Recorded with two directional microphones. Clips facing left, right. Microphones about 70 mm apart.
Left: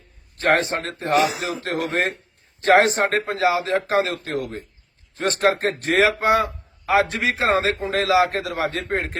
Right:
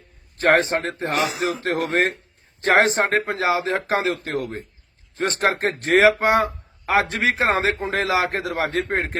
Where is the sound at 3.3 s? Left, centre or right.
Right.